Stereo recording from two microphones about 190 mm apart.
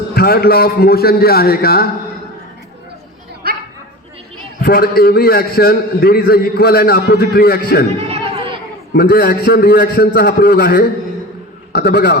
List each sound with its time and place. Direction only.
0.1 s a man's voice: 55° left (ahead or behind)
3.4 s dog: 55° right (ahead or behind)
4.6 s a man's voice: 55° left (ahead or behind)
8.1 s chatter: 25° right (ahead or behind)
9.0 s a man's voice: 55° left (ahead or behind)